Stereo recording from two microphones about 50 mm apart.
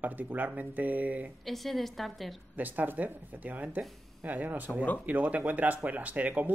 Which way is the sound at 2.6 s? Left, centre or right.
Right.